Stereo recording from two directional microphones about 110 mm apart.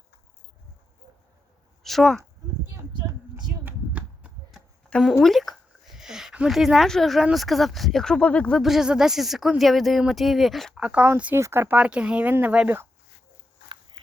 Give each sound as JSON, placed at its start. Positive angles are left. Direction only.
{"t": 1.8, "sound": "speech", "side_deg": 0}
{"t": 3.6, "sound": "a sound", "side_deg": -15}
{"t": 4.9, "sound": "speech", "side_deg": 5}
{"t": 5.2, "sound": "a sound", "side_deg": 0}
{"t": 7.3, "sound": "speech", "side_deg": 0}
{"t": 8.6, "sound": "speech", "side_deg": -5}
{"t": 10.8, "sound": "speech", "side_deg": -10}
{"t": 11.3, "sound": "speech", "side_deg": -25}